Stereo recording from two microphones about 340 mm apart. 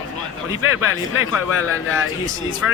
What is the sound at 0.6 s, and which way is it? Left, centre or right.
Speech, left.